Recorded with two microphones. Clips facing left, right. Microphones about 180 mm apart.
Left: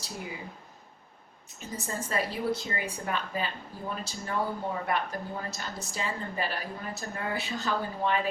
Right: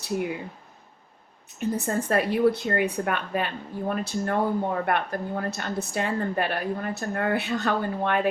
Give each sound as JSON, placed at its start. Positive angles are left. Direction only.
{"t": 0.0, "sound": "speech", "side_deg": -65}
{"t": 1.5, "sound": "speech", "side_deg": -65}